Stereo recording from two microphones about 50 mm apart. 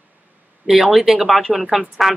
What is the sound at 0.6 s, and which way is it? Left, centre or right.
Speech, centre.